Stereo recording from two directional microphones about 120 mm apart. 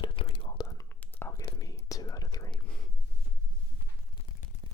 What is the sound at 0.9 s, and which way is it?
Whispering, 15° left (ahead or behind).